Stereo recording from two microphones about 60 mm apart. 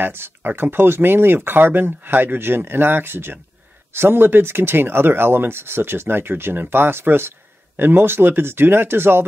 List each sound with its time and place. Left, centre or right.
0.0 s speech: right